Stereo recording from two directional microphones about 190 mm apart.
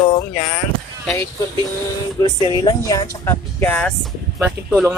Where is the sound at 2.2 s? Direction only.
20° left (ahead or behind).